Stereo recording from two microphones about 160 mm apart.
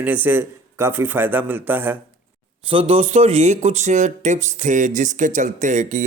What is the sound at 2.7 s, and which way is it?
A man's voice, 35° right (ahead or behind).